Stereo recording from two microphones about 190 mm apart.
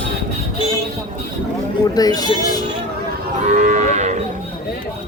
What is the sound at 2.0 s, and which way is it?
Speech, 20° left (ahead or behind).